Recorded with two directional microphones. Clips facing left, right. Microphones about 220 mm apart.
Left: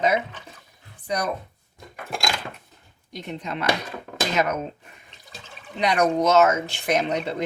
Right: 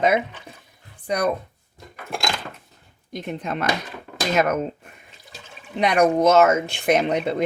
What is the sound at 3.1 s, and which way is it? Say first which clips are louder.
Speech: right 4 dB; 50° right (ahead or behind).